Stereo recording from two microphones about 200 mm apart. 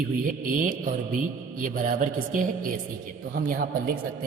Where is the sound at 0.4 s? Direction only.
45° right (ahead or behind).